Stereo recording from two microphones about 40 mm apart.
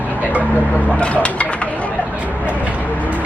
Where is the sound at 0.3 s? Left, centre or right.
Right.